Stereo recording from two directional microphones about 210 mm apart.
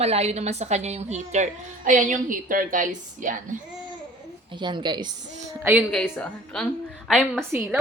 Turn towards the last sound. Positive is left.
turn(degrees=-10)  # may be behind; listen again after turning